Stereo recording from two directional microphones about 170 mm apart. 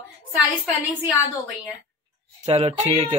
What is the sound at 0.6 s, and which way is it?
Speech, 10° right (ahead or behind).